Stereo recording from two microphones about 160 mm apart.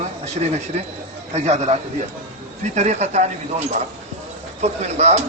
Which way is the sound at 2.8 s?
45° right (ahead or behind).